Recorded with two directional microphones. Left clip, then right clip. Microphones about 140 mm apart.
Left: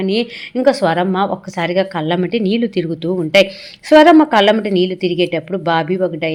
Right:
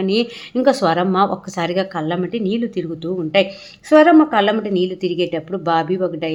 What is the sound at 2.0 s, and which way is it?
A woman's voice, 15° left (ahead or behind).